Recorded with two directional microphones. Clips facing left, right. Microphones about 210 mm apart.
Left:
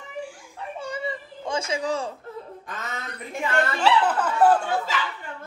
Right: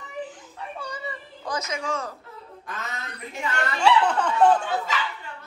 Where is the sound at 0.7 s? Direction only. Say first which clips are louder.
Left 6 dB; 25° left (ahead or behind).